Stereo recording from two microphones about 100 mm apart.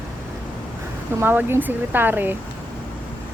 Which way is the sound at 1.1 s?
20° right (ahead or behind).